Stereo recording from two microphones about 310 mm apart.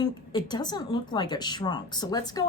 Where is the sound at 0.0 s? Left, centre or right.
Centre.